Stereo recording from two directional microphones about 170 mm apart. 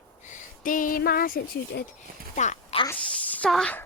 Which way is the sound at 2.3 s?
45° left (ahead or behind).